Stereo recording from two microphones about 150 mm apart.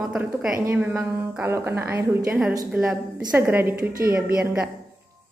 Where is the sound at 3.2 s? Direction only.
15° right (ahead or behind).